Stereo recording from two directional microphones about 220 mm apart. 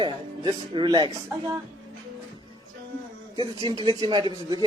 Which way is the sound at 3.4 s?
20° right (ahead or behind).